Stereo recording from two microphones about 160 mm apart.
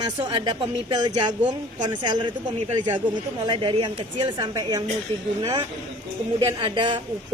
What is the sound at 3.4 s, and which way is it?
Speech, 30° right (ahead or behind).